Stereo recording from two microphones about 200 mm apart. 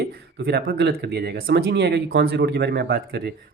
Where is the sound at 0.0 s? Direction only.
55° right (ahead or behind).